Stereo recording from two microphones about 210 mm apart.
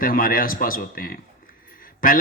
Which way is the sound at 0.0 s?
40° left (ahead or behind).